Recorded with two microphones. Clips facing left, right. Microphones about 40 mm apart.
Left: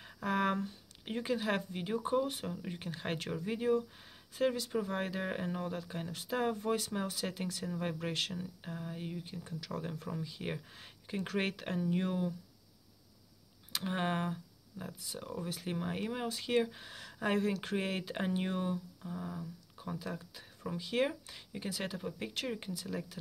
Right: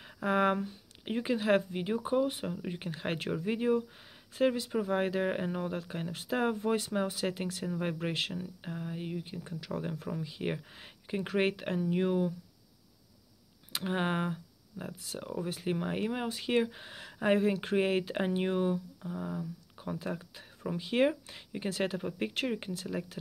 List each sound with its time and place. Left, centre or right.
0.2 s speech: right
0.6 s speech: centre
13.7 s speech: centre
16.3 s speech: right
21.6 s speech: right